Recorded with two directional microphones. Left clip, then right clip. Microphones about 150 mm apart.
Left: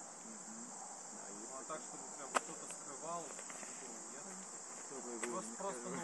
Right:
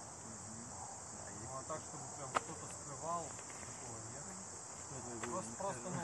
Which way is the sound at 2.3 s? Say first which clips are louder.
Left 1 dB; 65° left (ahead or behind).